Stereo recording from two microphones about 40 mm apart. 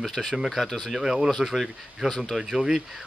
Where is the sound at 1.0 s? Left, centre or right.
Centre.